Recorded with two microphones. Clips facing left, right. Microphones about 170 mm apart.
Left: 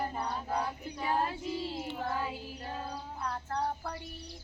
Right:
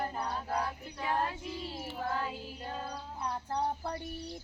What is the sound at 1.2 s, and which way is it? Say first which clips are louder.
Child singing: left 2 dB; 25° left (ahead or behind).